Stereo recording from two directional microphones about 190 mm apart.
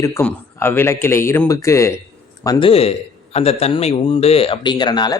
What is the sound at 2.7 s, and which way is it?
A man's voice, 30° left (ahead or behind).